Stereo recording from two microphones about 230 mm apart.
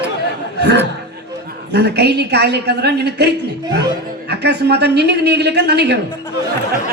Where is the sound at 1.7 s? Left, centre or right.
Right.